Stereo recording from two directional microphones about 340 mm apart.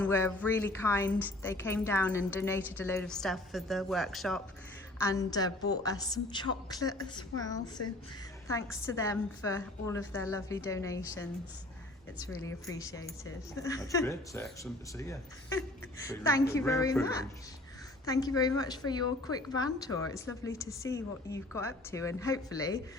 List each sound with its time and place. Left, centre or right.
0.0 s a woman's voice: centre
7.8 s a woman's voice: left
8.4 s a woman's voice: centre